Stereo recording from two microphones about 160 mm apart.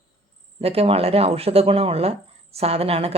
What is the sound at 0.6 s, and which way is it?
Speech, 40° right (ahead or behind).